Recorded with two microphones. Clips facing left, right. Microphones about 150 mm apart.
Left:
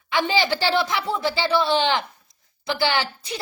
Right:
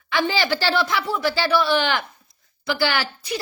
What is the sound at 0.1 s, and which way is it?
A woman's voice, 20° left (ahead or behind).